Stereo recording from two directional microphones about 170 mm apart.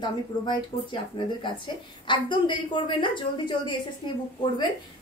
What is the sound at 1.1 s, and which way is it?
A woman's voice, 25° left (ahead or behind).